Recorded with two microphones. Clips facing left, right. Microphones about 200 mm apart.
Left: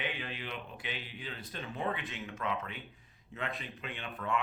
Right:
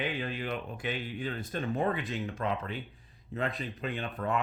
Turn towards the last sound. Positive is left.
turn(degrees=-40)  # may be behind; listen again after turning